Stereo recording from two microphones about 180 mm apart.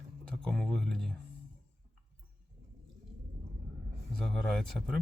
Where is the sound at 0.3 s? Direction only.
5° left (ahead or behind).